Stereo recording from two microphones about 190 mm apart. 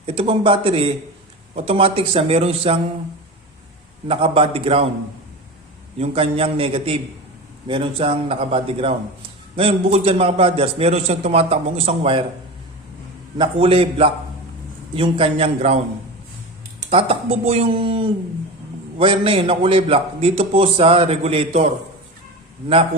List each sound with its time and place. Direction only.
0.0 s a man's voice: 30° right (ahead or behind)
4.1 s a man's voice: 30° right (ahead or behind)
6.0 s a man's voice: 30° right (ahead or behind)
13.4 s a man's voice: 30° right (ahead or behind)
16.8 s a man's voice: 30° right (ahead or behind)